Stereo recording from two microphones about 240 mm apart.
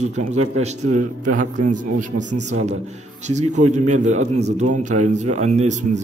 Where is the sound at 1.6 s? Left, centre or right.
Right.